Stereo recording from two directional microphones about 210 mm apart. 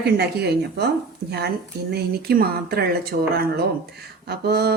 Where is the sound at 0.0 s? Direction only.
50° right (ahead or behind).